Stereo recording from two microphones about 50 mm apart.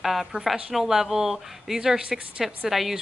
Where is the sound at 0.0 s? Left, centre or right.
Centre.